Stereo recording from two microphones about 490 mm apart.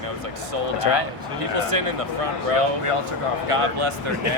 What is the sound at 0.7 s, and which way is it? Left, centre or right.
Speech, left.